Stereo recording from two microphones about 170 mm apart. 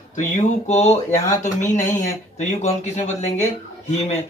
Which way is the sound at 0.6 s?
40° left (ahead or behind).